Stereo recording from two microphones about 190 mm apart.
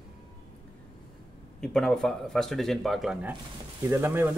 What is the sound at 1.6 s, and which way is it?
Speech, 5° left (ahead or behind).